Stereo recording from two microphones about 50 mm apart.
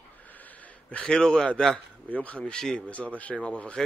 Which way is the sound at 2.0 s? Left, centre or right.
Left.